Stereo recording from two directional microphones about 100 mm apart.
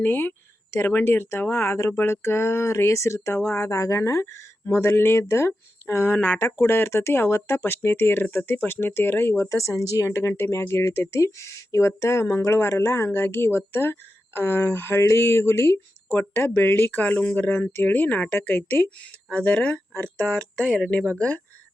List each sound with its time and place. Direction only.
0.0 s speech: 20° left (ahead or behind)
6.1 s speech: 15° left (ahead or behind)